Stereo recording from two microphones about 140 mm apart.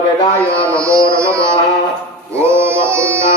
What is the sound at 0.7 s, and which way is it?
Carnatic music, 20° right (ahead or behind).